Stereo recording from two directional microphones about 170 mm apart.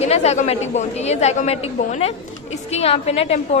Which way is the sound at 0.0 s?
40° left (ahead or behind).